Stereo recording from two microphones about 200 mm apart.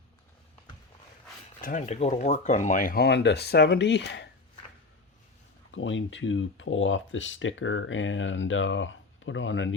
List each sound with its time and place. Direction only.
1.6 s speech: 35° left (ahead or behind); by 4.3 s 60° left (ahead or behind)
5.7 s speech: 70° left (ahead or behind)